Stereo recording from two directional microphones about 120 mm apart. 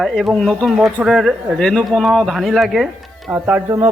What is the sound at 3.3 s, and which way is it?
Speech, 15° right (ahead or behind).